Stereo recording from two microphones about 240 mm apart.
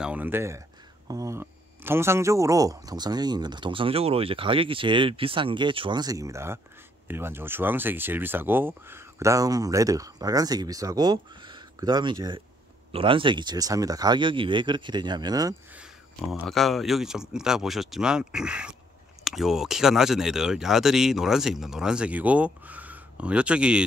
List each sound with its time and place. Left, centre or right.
0.0 s speech: centre
16.2 s speech: centre